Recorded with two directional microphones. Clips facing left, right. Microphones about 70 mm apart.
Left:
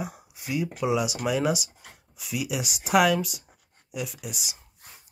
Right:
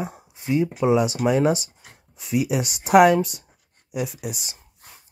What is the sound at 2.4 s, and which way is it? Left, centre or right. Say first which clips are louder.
Speech: right 4 dB; centre.